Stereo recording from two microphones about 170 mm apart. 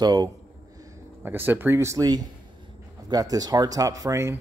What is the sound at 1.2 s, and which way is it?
Speech, 10° right (ahead or behind).